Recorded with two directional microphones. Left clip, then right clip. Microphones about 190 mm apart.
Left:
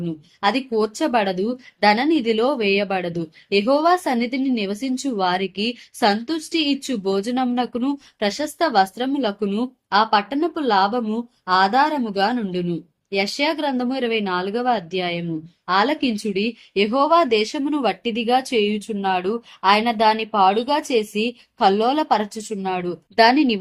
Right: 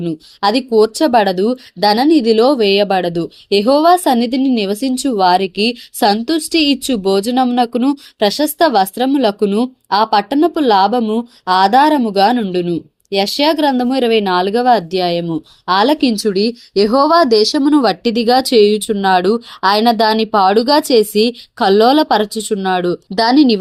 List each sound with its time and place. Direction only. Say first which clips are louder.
0.4 s speech: right 8 dB; 30° right (ahead or behind)